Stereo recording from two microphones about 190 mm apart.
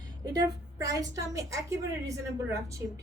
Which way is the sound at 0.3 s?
20° right (ahead or behind).